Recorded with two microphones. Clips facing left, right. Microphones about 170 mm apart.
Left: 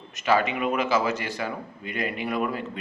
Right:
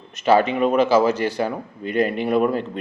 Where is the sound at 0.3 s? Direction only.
30° right (ahead or behind).